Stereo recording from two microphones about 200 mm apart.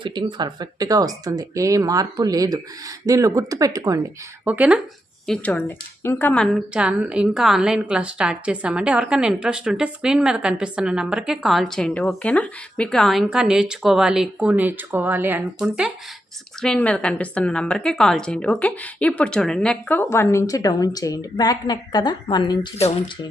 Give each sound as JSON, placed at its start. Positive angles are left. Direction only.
{"t": 0.0, "sound": "speech", "side_deg": -25}
{"t": 5.2, "sound": "a woman's voice", "side_deg": 5}